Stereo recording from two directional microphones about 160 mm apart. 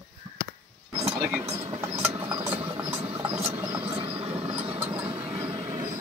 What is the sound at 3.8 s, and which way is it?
Vehicle, 35° right (ahead or behind).